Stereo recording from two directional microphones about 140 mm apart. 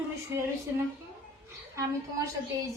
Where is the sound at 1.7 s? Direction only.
25° right (ahead or behind).